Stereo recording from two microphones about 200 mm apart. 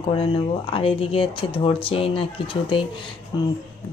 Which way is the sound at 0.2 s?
30° left (ahead or behind).